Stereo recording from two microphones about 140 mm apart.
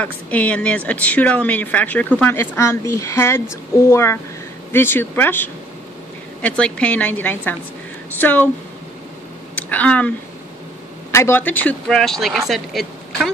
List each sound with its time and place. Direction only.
0.0 s a woman's voice: 10° left (ahead or behind)
9.6 s speech: 10° left (ahead or behind)